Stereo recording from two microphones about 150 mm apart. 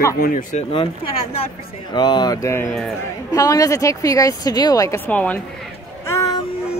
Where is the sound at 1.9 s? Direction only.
30° left (ahead or behind).